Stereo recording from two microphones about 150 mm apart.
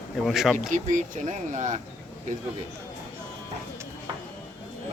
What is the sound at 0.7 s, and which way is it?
Speech, 55° right (ahead or behind).